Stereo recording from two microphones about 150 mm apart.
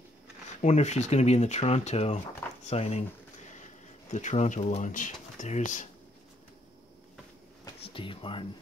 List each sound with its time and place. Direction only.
0.6 s speech: 50° left (ahead or behind)
4.1 s speech: 55° left (ahead or behind)
7.8 s speech: 35° left (ahead or behind)